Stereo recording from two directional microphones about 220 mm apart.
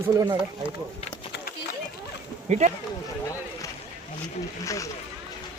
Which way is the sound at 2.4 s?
30° right (ahead or behind).